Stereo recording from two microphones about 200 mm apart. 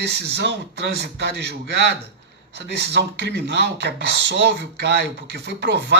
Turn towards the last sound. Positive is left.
turn(degrees=-55)  # may be behind; listen again after turning